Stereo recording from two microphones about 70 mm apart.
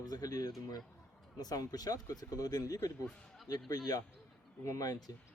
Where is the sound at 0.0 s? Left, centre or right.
Left.